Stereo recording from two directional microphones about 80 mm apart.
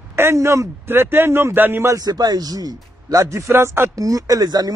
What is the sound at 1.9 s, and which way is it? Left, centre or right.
A man's voice, right.